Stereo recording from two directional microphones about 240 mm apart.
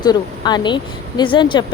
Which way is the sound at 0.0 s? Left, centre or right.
Centre.